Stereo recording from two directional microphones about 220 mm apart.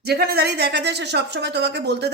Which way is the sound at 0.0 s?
45° right (ahead or behind).